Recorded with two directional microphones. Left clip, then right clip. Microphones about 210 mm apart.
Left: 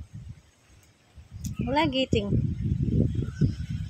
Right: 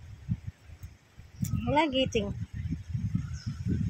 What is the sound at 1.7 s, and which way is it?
Speech, 5° left (ahead or behind).